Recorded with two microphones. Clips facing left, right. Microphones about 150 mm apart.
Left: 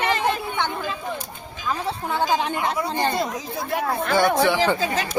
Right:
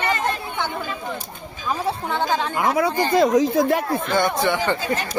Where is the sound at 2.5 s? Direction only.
90° right.